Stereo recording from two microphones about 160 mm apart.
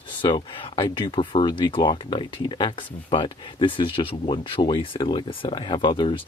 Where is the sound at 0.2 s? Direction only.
30° left (ahead or behind).